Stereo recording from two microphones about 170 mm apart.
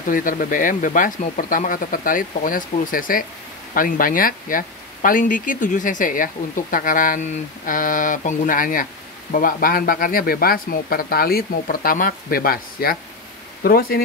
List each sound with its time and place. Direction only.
0.1 s speech: 55° left (ahead or behind)